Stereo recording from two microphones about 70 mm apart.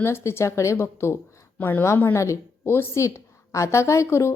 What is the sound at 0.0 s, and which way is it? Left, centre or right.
Speech, left.